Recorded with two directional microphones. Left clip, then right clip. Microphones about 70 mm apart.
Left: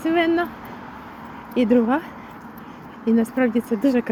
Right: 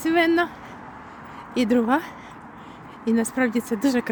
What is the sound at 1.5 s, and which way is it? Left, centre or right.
Speech, right.